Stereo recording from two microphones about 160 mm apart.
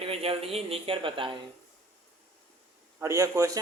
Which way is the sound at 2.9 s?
20° right (ahead or behind).